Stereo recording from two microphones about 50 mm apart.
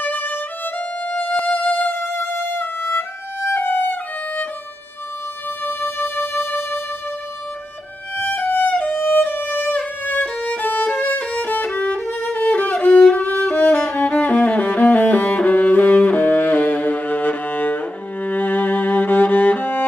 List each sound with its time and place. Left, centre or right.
0.0 s violin: left
1.4 s music: left
2.1 s music: left
5.6 s music: left
8.2 s violin: left
13.8 s music: left